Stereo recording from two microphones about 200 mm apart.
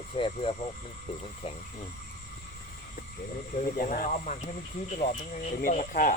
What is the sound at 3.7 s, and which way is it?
Speech, 45° left (ahead or behind).